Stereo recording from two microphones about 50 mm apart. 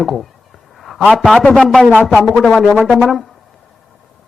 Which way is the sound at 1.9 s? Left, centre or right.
Left.